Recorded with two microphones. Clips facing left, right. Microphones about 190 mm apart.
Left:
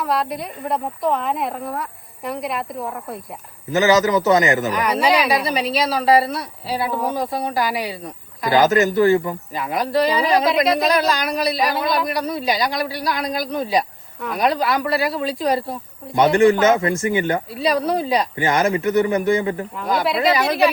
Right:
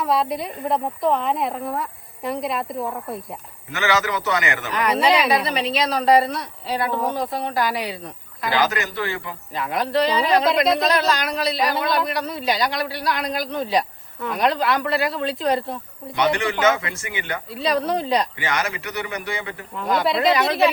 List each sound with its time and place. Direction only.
0.0 s speech: centre (ahead or behind)
3.7 s a man's voice: 40° left (ahead or behind)
4.9 s a woman's voice: 5° left (ahead or behind)
8.4 s a man's voice: 45° left (ahead or behind)
9.6 s speech: 10° left (ahead or behind)
11.1 s a woman's voice: 15° left (ahead or behind)
11.5 s a woman's voice: centre (ahead or behind)
16.1 s a man's voice: 45° left (ahead or behind)
17.5 s a woman's voice: 5° left (ahead or behind)
18.3 s a man's voice: 45° left (ahead or behind)
19.7 s speech: centre (ahead or behind)